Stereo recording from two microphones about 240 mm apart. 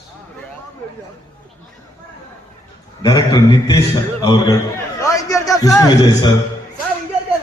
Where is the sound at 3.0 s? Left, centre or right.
Centre.